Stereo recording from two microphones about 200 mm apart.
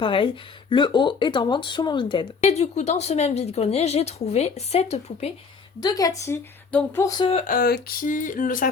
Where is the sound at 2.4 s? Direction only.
35° left (ahead or behind).